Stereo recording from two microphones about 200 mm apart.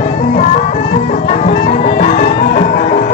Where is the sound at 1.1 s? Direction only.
35° left (ahead or behind).